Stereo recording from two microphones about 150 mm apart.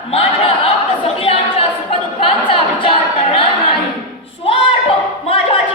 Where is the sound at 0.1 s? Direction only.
40° left (ahead or behind).